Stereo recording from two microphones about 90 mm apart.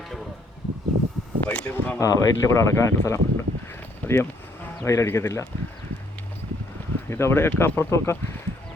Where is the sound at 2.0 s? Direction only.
40° left (ahead or behind).